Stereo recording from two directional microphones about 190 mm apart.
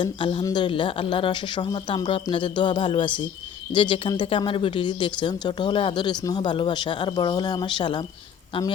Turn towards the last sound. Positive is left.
turn(degrees=25)  # may be behind; listen again after turning